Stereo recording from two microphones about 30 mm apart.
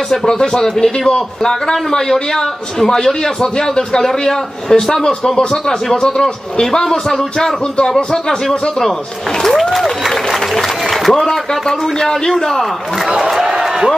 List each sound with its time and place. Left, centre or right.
0.1 s a man's voice: centre
3.3 s a man's voice: left
4.0 s a man's voice: centre; by 5.8 s left
6.2 s a man's voice: centre
9.6 s applause: centre
11.1 s a man's voice: centre
13.2 s a sound: centre